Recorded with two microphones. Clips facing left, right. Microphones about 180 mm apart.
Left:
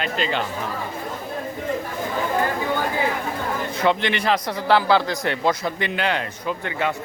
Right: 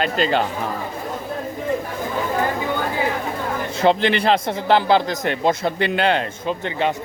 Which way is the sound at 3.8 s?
30° right (ahead or behind).